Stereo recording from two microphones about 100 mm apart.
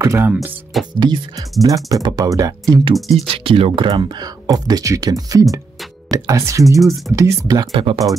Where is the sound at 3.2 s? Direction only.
75° right (ahead or behind); by 7.6 s 35° right (ahead or behind).